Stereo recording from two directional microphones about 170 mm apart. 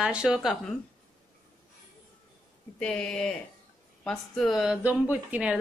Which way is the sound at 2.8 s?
5° left (ahead or behind).